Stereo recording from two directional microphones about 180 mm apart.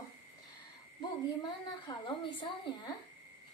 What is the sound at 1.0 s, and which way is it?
A woman's voice, 25° left (ahead or behind).